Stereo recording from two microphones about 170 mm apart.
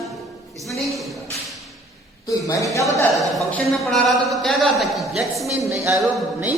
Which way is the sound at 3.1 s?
Centre (ahead or behind).